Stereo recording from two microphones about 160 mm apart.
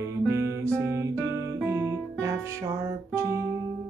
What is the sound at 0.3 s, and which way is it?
Music, 15° right (ahead or behind).